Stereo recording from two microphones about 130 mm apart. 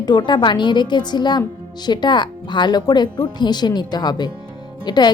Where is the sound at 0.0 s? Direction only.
35° left (ahead or behind).